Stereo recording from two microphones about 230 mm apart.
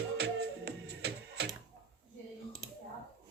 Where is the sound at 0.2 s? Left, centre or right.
Right.